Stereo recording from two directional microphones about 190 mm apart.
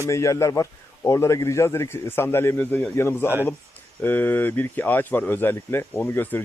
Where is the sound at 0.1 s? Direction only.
15° left (ahead or behind).